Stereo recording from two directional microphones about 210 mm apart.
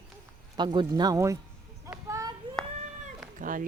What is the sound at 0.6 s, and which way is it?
Speech, 20° right (ahead or behind).